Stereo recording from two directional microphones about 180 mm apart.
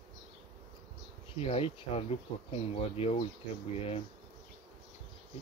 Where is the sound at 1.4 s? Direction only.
35° left (ahead or behind).